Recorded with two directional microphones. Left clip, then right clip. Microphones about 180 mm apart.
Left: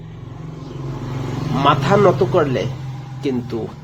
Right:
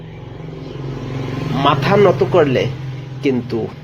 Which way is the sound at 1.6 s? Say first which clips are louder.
Right 1 dB; centre (ahead or behind).